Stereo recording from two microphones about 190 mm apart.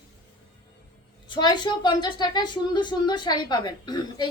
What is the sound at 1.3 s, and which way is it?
A woman's voice, 25° left (ahead or behind).